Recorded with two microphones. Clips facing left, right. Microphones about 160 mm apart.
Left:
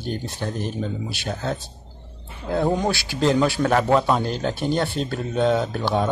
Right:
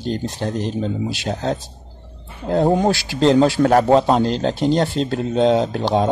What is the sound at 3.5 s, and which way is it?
Speech, 40° right (ahead or behind).